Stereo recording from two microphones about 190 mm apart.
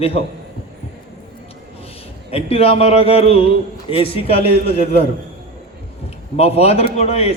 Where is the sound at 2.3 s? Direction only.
30° left (ahead or behind).